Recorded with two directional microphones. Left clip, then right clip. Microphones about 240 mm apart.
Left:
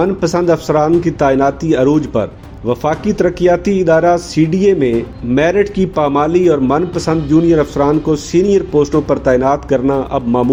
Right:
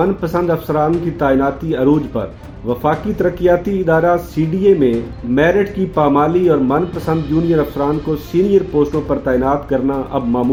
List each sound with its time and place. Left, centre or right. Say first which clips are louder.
0.0 s speech: left 3 dB; left
5.3 s speech: left 1 dB; left